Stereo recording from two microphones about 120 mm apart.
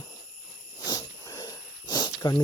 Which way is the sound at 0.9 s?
30° left (ahead or behind).